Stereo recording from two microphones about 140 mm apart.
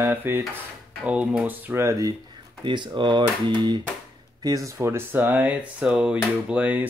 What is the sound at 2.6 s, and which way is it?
Speech, 35° right (ahead or behind).